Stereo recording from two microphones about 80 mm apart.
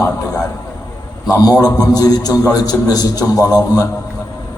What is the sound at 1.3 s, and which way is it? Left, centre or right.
A man's voice, left.